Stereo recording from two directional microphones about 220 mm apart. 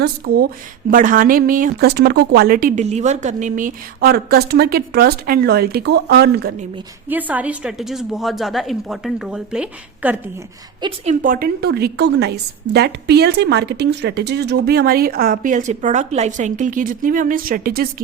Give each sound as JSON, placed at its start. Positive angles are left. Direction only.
{"t": 0.0, "sound": "speech", "side_deg": -45}
{"t": 7.1, "sound": "a woman's voice", "side_deg": -5}
{"t": 10.8, "sound": "a woman's voice", "side_deg": -20}
{"t": 11.1, "sound": "speech", "side_deg": -40}